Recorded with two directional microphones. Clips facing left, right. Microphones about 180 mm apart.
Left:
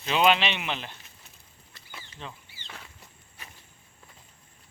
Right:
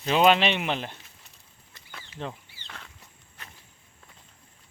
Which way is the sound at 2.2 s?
55° right (ahead or behind).